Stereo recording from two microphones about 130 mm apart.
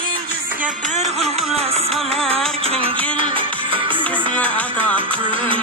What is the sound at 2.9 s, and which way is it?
Music, 10° left (ahead or behind).